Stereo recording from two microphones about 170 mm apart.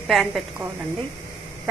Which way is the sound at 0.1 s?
Centre (ahead or behind).